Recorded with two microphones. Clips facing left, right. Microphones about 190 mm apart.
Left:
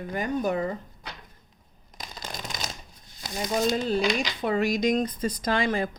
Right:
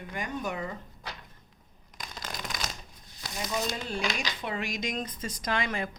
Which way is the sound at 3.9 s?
35° left (ahead or behind).